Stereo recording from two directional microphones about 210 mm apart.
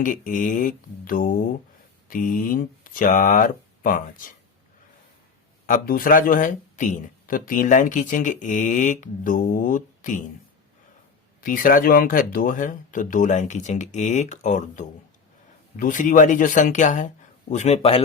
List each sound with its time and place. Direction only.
0.0 s speech: 40° left (ahead or behind)
5.6 s speech: 40° left (ahead or behind)
11.3 s speech: 40° left (ahead or behind)